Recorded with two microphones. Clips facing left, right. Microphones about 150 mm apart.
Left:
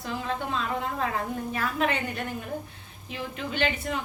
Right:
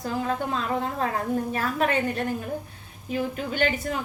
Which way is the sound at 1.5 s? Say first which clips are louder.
Left 1 dB; 40° right (ahead or behind).